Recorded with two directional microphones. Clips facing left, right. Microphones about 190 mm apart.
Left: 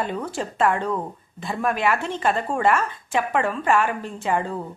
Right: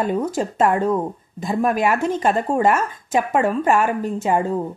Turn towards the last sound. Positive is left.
turn(degrees=-40)  # may be behind; listen again after turning